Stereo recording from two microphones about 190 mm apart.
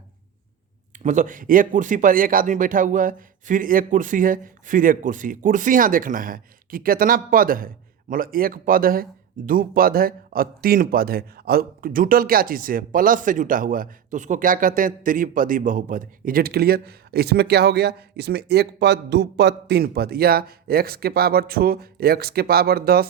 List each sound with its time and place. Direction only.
1.0 s a man's voice: 40° right (ahead or behind)